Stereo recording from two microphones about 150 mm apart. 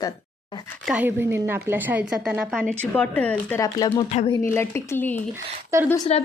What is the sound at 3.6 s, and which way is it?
Speech, 25° left (ahead or behind).